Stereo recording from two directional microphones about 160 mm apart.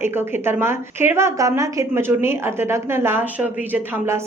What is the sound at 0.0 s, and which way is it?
Speech, 15° right (ahead or behind).